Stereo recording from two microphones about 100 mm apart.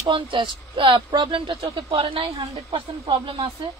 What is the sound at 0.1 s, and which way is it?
Speech, 55° right (ahead or behind).